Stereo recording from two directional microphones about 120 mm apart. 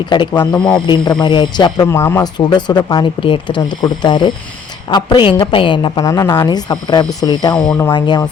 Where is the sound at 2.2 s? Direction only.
35° left (ahead or behind).